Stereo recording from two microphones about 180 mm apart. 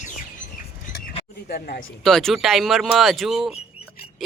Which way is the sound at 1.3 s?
60° left (ahead or behind).